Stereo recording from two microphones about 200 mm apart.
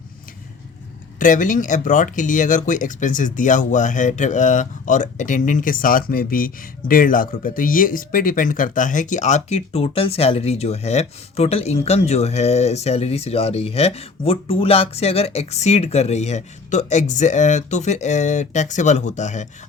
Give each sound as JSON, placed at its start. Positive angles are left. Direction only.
{"t": 1.2, "sound": "speech", "side_deg": 40}